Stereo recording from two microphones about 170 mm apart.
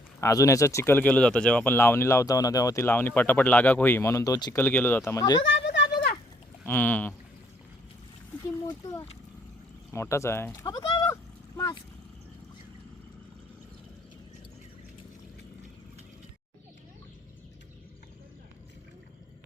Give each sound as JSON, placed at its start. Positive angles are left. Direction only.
{"t": 0.2, "sound": "speech", "side_deg": 20}
{"t": 4.5, "sound": "speech", "side_deg": 10}
{"t": 5.5, "sound": "a sound", "side_deg": 90}
{"t": 6.7, "sound": "speech", "side_deg": 10}
{"t": 8.4, "sound": "speech", "side_deg": 20}